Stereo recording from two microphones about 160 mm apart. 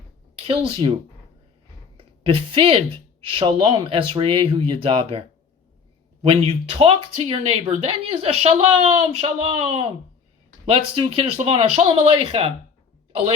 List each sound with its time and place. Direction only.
0.3 s speech: 35° right (ahead or behind)
2.0 s speech: 35° right (ahead or behind)
6.2 s speech: 35° right (ahead or behind)